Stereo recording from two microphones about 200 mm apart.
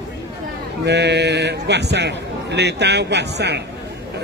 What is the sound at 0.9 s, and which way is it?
A man's voice, 60° right (ahead or behind).